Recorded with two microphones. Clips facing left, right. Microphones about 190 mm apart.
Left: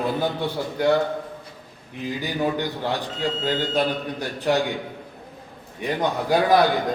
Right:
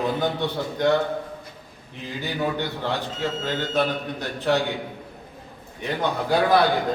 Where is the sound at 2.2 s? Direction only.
15° left (ahead or behind).